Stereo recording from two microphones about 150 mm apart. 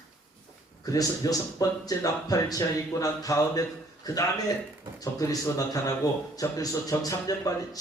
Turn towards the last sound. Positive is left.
turn(degrees=25)  # may be behind; listen again after turning